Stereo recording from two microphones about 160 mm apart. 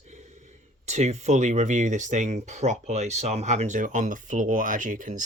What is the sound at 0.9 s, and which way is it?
Speech, 45° right (ahead or behind).